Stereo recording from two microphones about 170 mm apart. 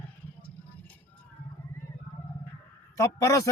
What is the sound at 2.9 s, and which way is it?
Speech, 20° left (ahead or behind).